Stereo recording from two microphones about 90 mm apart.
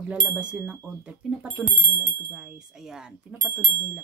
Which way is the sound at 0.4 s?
15° right (ahead or behind).